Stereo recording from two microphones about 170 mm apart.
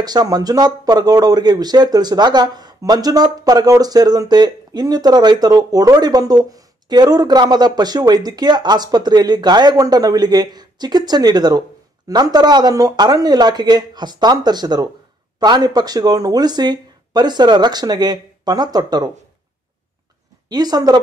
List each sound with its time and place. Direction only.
0.0 s speech: 25° right (ahead or behind)
20.4 s speech: 25° right (ahead or behind)